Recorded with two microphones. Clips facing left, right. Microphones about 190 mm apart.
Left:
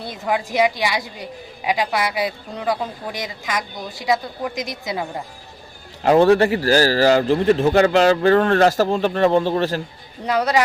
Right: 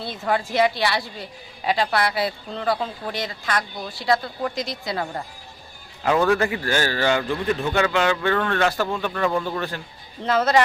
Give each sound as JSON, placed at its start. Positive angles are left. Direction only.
{"t": 0.0, "sound": "a woman's voice", "side_deg": 15}
{"t": 6.0, "sound": "a man's voice", "side_deg": 35}
{"t": 10.2, "sound": "a woman's voice", "side_deg": 10}